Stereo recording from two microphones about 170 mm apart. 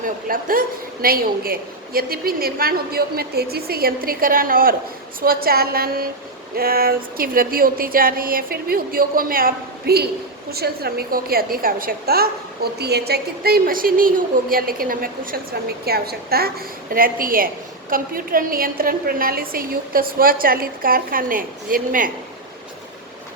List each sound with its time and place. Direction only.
0.0 s a woman's voice: 55° right (ahead or behind)